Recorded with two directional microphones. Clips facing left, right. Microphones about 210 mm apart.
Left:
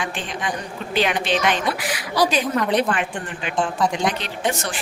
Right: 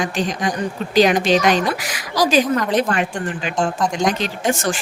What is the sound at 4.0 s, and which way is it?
Speech, 45° right (ahead or behind).